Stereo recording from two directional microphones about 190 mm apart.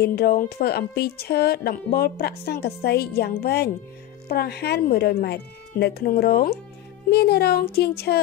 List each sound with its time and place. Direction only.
0.0 s speech: 55° left (ahead or behind)